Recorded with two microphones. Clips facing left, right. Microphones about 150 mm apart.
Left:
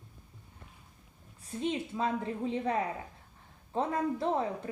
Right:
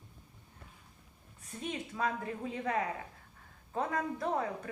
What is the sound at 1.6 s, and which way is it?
A woman's voice, 25° left (ahead or behind).